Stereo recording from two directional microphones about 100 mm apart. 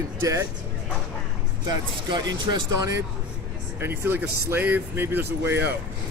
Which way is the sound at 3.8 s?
20° right (ahead or behind).